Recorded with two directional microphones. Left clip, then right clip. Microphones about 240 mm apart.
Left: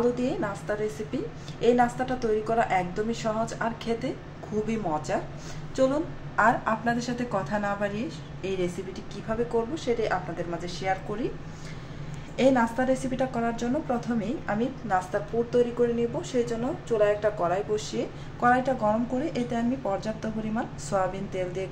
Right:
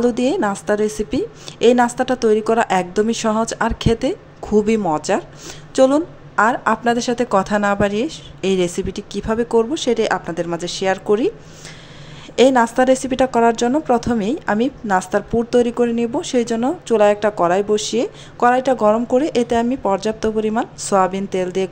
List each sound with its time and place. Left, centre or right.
0.0 s a woman's voice: right
12.4 s a woman's voice: right